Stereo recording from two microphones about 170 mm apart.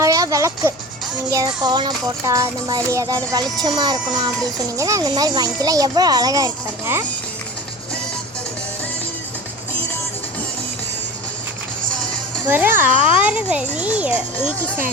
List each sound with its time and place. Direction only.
0.0 s music: 20° right (ahead or behind)
1.3 s speech: 20° right (ahead or behind)
12.5 s speech: 10° right (ahead or behind)